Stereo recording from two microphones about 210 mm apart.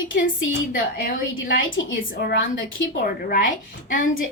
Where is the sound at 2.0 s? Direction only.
55° left (ahead or behind); by 4.0 s 40° left (ahead or behind).